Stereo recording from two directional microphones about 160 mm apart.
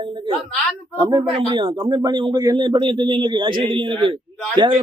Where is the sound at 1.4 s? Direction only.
30° right (ahead or behind).